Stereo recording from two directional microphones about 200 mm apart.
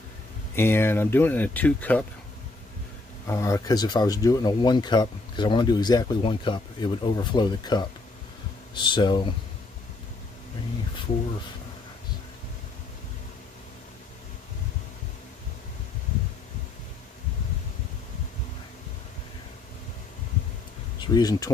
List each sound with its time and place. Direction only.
0.6 s speech: 10° left (ahead or behind)
3.3 s speech: 15° left (ahead or behind)
21.0 s speech: 20° left (ahead or behind)